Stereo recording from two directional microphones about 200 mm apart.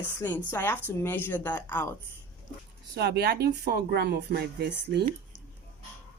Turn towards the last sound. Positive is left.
turn(degrees=-55)  # may be behind; listen again after turning